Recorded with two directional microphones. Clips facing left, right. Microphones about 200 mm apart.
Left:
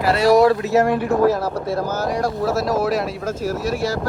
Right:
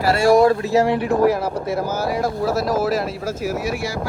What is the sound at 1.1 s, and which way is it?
Speech, 10° right (ahead or behind).